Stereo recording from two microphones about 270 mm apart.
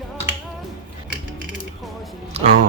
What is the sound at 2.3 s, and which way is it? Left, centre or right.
Music, right.